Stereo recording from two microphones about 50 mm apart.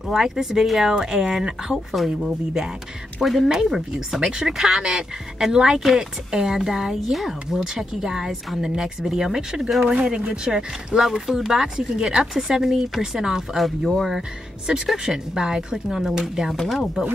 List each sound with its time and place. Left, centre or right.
0.1 s speech: centre
10.0 s speech: right
11.0 s speech: centre
13.8 s speech: centre
14.7 s speech: right; by 17.0 s centre